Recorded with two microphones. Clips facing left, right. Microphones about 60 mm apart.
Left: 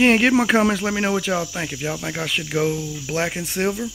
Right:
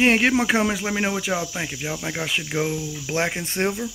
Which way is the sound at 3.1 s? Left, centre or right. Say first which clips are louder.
Even; right.